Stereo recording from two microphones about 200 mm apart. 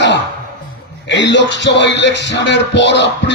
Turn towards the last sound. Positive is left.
turn(degrees=65)  # may be behind; listen again after turning